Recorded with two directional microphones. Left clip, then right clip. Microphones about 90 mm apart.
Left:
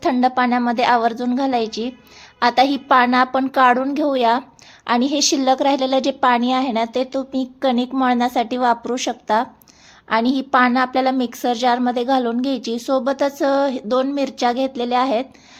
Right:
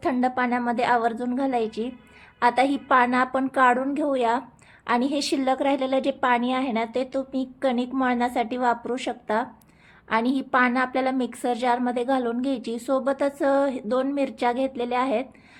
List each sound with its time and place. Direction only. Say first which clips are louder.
0.0 s a woman's voice: left 7 dB; 35° left (ahead or behind)